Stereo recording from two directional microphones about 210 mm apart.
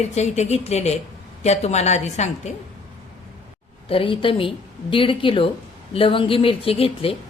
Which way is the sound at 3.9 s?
25° left (ahead or behind).